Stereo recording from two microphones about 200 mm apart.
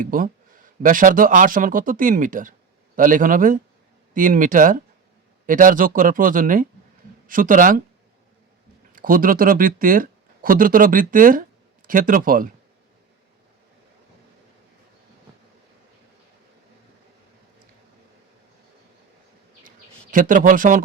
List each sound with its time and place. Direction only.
0.0 s speech: 45° right (ahead or behind)
8.9 s speech: 45° right (ahead or behind)
19.6 s a sound: 45° right (ahead or behind)